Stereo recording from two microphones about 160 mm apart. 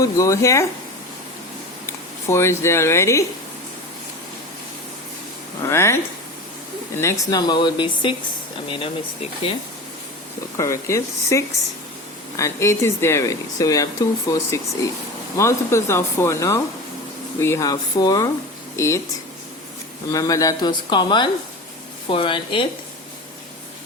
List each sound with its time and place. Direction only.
0.0 s speech: 20° left (ahead or behind)
1.9 s speech: 15° left (ahead or behind)
5.6 s speech: 15° left (ahead or behind); by 9.6 s 35° left (ahead or behind)
10.6 s speech: 20° left (ahead or behind)
20.1 s speech: 20° left (ahead or behind)